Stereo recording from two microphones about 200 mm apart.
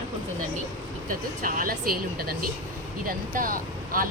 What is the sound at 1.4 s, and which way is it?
Speech, 45° right (ahead or behind).